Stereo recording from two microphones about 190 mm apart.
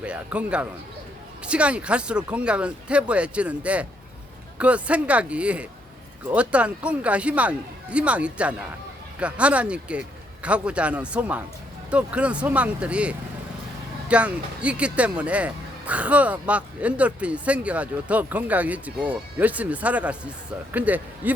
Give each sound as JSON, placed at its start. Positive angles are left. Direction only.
{"t": 0.0, "sound": "speech", "side_deg": -5}